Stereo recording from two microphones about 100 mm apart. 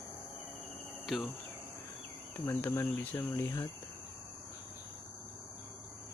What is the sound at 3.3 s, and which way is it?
Mantra, 25° left (ahead or behind).